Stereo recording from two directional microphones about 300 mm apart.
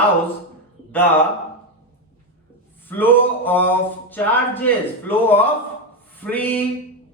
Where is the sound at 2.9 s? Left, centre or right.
Centre.